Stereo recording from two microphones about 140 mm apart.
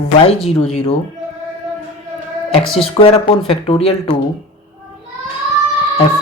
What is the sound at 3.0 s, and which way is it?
Speech, 40° left (ahead or behind).